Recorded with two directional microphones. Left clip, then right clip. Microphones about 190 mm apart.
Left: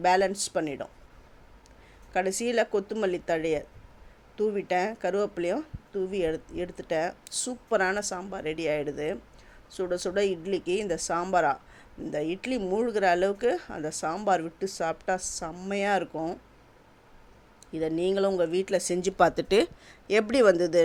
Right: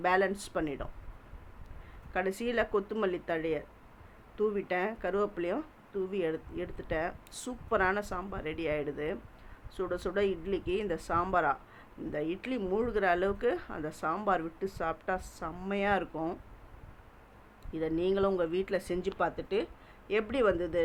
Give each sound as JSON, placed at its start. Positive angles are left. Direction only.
{"t": 0.0, "sound": "a woman's voice", "side_deg": 20}
{"t": 2.1, "sound": "a woman's voice", "side_deg": 20}
{"t": 17.7, "sound": "a woman's voice", "side_deg": 20}
{"t": 19.2, "sound": "a woman's voice", "side_deg": 50}